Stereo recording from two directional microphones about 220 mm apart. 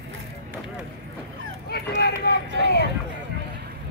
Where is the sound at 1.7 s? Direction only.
45° left (ahead or behind).